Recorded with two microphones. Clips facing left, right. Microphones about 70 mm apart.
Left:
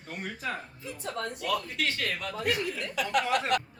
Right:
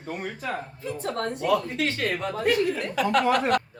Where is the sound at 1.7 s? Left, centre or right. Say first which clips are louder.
Right 5 dB; right.